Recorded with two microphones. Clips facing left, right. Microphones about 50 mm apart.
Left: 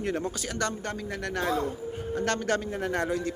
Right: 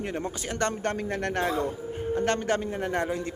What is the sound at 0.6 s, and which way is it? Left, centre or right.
Speech, right.